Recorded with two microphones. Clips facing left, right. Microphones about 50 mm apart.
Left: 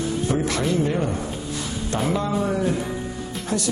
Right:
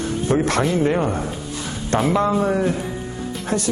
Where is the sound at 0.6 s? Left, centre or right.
Centre.